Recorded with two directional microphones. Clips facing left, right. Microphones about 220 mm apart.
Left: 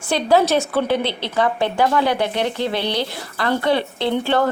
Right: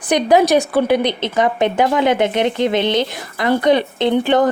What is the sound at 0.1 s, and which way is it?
A woman's voice, 15° right (ahead or behind).